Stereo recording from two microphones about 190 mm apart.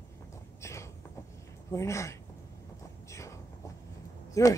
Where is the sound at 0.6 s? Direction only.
15° left (ahead or behind).